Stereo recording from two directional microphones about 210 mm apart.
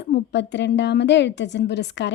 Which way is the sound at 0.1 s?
55° left (ahead or behind).